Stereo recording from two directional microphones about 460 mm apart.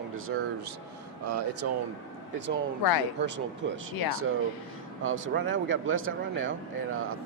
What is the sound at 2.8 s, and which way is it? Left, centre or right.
Speech, left.